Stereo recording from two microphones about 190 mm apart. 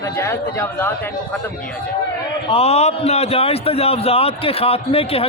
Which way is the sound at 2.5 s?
35° left (ahead or behind).